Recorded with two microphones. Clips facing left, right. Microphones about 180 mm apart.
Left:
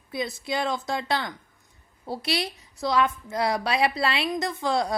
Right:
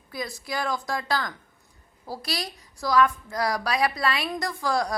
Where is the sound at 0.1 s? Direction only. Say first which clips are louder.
Left 3 dB; 25° left (ahead or behind).